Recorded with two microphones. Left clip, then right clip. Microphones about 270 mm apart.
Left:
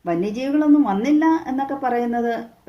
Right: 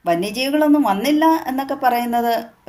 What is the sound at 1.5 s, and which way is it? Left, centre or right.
Speech, right.